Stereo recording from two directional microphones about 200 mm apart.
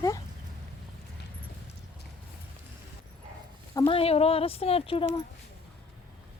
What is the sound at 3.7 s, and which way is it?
Speech, 25° left (ahead or behind).